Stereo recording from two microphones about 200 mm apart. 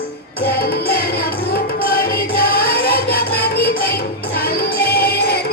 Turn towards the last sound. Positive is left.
turn(degrees=50)  # may be behind; listen again after turning